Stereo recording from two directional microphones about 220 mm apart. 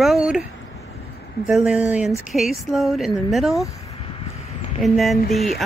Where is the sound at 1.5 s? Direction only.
5° right (ahead or behind).